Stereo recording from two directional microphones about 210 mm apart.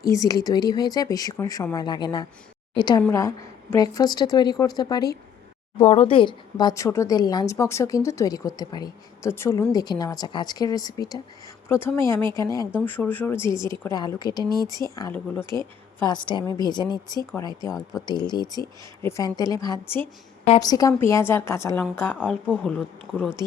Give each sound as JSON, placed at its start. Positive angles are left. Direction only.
{"t": 0.1, "sound": "a woman's voice", "side_deg": 15}
{"t": 22.4, "sound": "speech", "side_deg": -5}